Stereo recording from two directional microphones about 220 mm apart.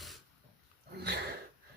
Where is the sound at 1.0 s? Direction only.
45° right (ahead or behind).